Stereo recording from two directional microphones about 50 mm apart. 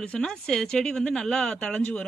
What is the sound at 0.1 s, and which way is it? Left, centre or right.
Speech, centre.